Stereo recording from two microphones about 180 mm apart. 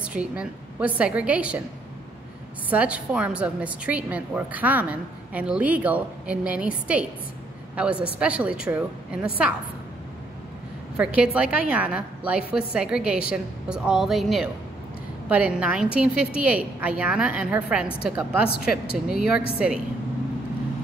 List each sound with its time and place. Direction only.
0.0 s a woman's voice: 5° right (ahead or behind)
2.7 s a woman's voice: 5° right (ahead or behind)
7.7 s a woman's voice: 5° right (ahead or behind)
11.0 s a woman's voice: 5° right (ahead or behind)